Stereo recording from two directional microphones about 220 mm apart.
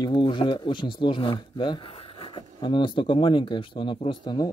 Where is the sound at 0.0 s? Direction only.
20° left (ahead or behind).